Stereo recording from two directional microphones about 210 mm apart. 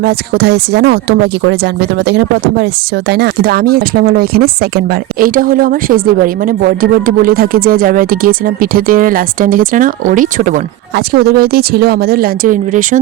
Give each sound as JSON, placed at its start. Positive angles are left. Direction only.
{"t": 0.0, "sound": "speech", "side_deg": -50}